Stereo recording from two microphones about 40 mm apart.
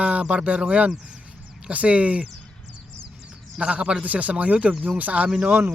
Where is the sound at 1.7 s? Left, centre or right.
Right.